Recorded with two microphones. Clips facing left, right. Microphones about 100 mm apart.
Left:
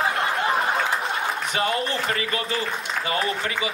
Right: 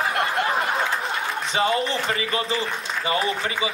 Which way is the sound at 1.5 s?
25° right (ahead or behind).